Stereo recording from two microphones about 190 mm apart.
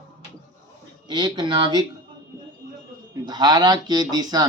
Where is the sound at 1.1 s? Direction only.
20° right (ahead or behind).